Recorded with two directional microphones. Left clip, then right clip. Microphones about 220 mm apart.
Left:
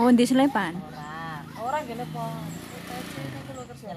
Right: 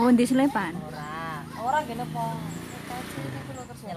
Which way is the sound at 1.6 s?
25° left (ahead or behind).